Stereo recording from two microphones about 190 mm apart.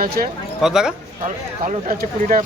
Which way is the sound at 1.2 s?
40° right (ahead or behind).